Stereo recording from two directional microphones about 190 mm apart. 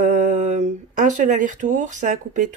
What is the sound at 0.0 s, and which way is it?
Speech, 40° right (ahead or behind).